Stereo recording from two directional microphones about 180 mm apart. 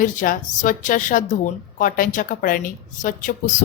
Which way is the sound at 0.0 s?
45° left (ahead or behind).